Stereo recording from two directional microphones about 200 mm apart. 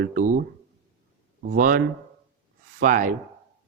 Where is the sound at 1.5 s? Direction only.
45° right (ahead or behind).